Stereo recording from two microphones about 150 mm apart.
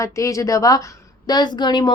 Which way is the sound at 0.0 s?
20° left (ahead or behind).